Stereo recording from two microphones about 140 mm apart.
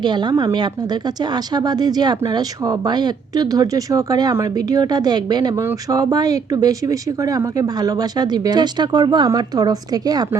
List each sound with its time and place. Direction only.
0.0 s a woman's voice: 30° right (ahead or behind)